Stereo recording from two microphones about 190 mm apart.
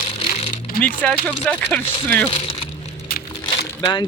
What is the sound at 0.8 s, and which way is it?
Speech, 5° left (ahead or behind).